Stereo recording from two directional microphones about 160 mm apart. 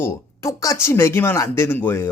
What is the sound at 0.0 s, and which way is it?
A woman's voice, 20° left (ahead or behind).